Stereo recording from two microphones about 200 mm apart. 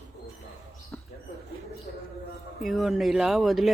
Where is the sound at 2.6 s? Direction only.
Centre (ahead or behind).